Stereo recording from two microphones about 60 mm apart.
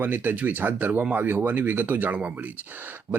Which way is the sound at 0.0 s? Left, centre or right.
Right.